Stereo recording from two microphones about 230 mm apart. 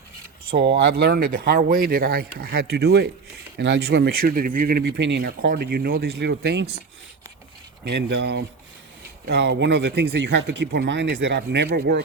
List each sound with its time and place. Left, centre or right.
0.8 s speech: right
7.9 s speech: right